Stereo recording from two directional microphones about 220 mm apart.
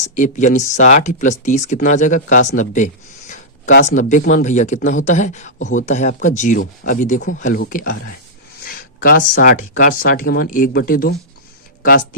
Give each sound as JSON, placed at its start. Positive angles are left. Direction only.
{"t": 0.2, "sound": "speech", "side_deg": 35}